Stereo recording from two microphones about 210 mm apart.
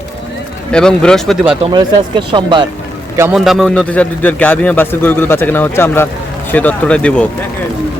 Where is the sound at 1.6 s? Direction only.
20° right (ahead or behind).